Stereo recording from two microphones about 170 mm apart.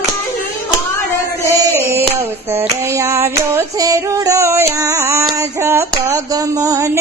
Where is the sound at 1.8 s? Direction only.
15° right (ahead or behind).